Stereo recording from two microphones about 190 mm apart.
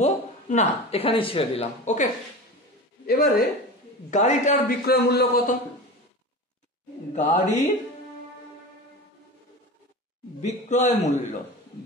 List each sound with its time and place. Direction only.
0.0 s speech: 35° left (ahead or behind)
3.1 s a man's voice: 50° left (ahead or behind)
4.1 s a man's voice: 40° left (ahead or behind); by 5.6 s 55° left (ahead or behind)
7.2 s a man's voice: 40° left (ahead or behind)
10.4 s a man's voice: 40° left (ahead or behind)